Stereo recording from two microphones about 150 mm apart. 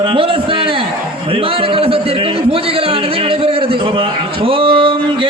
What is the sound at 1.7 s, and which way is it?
Speech, 40° right (ahead or behind).